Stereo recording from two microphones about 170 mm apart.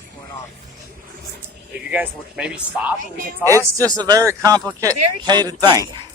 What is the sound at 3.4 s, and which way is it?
Speech, 20° right (ahead or behind).